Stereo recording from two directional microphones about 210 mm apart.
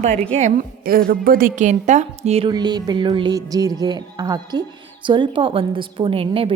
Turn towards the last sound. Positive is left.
turn(degrees=-25)  # may be behind; listen again after turning